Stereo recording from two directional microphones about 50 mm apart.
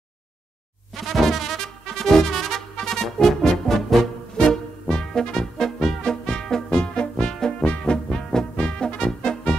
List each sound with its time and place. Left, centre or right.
1.0 s music: centre
6.8 s brass instrument: centre